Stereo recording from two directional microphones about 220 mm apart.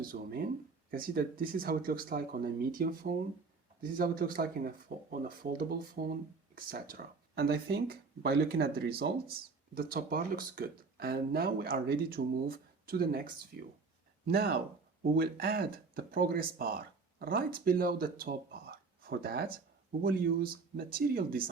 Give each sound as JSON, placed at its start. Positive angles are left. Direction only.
{"t": 0.0, "sound": "speech", "side_deg": -40}